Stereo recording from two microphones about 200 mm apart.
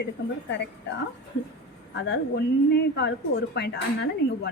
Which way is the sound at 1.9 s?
60° left (ahead or behind).